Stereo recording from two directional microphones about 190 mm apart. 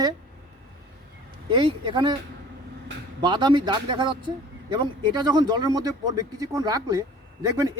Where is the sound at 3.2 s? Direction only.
25° right (ahead or behind).